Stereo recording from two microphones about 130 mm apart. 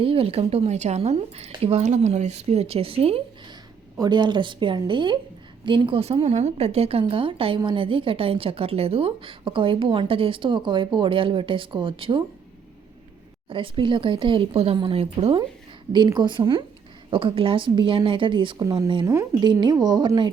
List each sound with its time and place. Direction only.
0.0 s a woman's voice: 45° right (ahead or behind)
3.9 s a woman's voice: 35° right (ahead or behind)
13.5 s a woman's voice: 40° right (ahead or behind)
19.0 s speech: 25° right (ahead or behind)
19.4 s a woman's voice: 35° right (ahead or behind)